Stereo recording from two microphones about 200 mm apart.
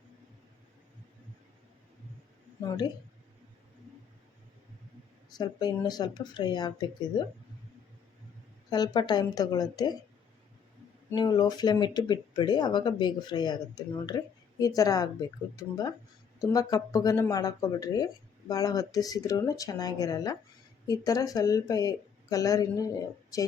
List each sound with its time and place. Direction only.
2.6 s speech: 20° left (ahead or behind)
5.4 s speech: 20° left (ahead or behind)
8.7 s speech: 20° left (ahead or behind)
11.1 s speech: 20° left (ahead or behind)